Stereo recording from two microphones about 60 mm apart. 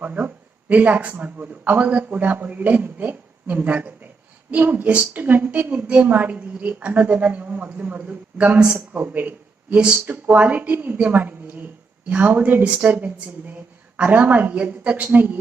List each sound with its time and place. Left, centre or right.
0.0 s a woman's voice: right